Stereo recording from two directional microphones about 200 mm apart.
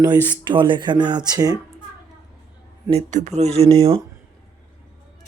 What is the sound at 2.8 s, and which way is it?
Speech, 35° right (ahead or behind).